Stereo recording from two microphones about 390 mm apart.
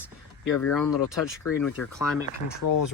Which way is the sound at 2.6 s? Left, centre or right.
Left.